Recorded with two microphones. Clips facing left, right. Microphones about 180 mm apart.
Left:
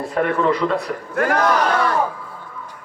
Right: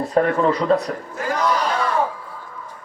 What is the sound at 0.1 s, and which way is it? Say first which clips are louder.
Speech: right 1 dB; 30° right (ahead or behind).